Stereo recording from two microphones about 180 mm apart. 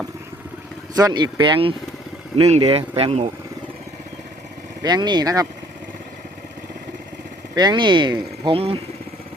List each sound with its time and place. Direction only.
0.9 s speech: 20° right (ahead or behind)
4.8 s speech: 25° right (ahead or behind)
7.5 s speech: 25° right (ahead or behind)